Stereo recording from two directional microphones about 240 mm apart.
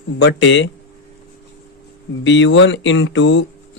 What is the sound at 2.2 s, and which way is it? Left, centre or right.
Speech, left.